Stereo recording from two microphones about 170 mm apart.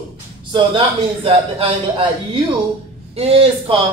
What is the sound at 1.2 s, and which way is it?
Speech, 35° right (ahead or behind).